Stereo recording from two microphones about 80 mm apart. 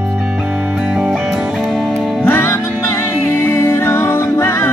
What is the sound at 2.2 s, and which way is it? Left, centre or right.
Music, left.